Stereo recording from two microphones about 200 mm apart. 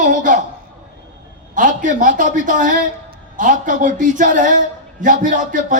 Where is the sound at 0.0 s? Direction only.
40° right (ahead or behind).